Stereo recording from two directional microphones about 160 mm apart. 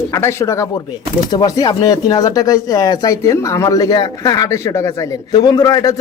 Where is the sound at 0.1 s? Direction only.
15° left (ahead or behind).